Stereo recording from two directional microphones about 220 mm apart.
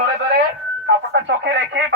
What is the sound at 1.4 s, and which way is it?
Speech, 55° right (ahead or behind).